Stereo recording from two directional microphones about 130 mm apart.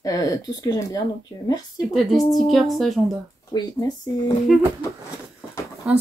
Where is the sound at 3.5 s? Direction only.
30° left (ahead or behind).